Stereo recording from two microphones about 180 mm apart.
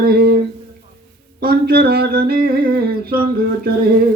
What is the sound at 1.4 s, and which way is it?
Humming, 60° right (ahead or behind).